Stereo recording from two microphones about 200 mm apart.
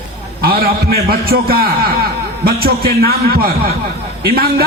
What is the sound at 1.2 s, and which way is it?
A man's voice, 50° right (ahead or behind).